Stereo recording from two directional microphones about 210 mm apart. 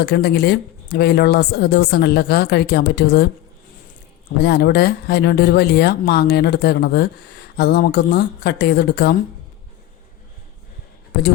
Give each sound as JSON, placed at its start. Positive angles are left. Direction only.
{"t": 0.0, "sound": "speech", "side_deg": 50}
{"t": 4.4, "sound": "speech", "side_deg": 50}